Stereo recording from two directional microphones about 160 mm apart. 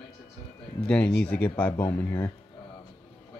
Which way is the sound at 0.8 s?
5° left (ahead or behind).